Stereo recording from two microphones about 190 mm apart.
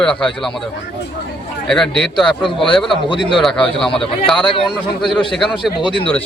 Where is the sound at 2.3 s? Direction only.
25° left (ahead or behind).